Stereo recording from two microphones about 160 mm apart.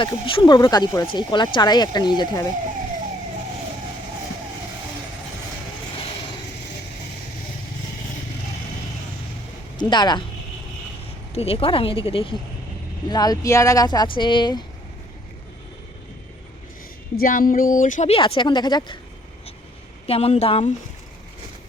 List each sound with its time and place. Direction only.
0.0 s speech: 30° left (ahead or behind)
9.7 s speech: 25° left (ahead or behind)
11.3 s speech: 35° left (ahead or behind)
13.1 s speech: 25° left (ahead or behind)
17.2 s speech: 60° left (ahead or behind)
18.1 s speech: 35° left (ahead or behind)
20.1 s speech: 40° left (ahead or behind)